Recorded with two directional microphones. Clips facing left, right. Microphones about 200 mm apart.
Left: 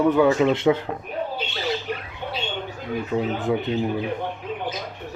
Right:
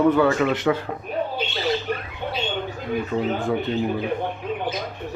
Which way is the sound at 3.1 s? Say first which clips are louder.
Left 2 dB; 15° left (ahead or behind).